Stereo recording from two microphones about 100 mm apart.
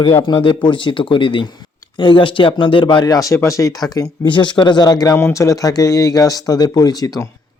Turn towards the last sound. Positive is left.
turn(degrees=40)  # may be behind; listen again after turning